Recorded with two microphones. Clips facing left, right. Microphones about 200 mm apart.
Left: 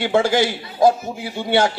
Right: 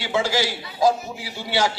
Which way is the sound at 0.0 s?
55° left (ahead or behind).